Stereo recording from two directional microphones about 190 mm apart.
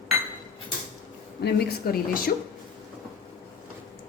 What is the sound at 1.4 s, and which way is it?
Speech, 60° left (ahead or behind).